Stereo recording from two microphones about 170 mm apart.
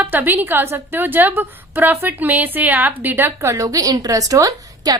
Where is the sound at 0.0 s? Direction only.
10° right (ahead or behind).